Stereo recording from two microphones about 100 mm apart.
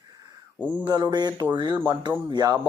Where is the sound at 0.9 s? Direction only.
45° right (ahead or behind).